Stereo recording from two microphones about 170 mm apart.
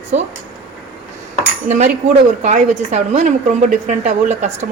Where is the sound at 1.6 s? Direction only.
40° right (ahead or behind).